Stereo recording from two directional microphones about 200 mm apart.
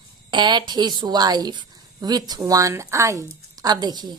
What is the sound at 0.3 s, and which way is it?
A woman's voice, 20° right (ahead or behind).